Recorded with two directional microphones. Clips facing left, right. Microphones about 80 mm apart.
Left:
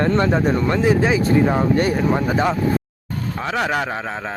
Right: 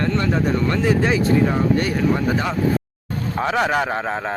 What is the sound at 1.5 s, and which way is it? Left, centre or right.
Speech, left.